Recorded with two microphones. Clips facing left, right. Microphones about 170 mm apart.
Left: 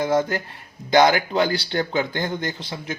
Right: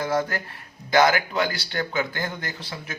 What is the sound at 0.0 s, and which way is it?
Speech, 25° left (ahead or behind).